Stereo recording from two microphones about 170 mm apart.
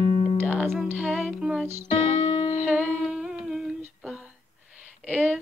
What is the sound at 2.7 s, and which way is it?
Humming, 5° right (ahead or behind).